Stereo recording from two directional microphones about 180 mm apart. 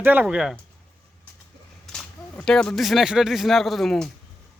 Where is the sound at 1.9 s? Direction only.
Centre (ahead or behind).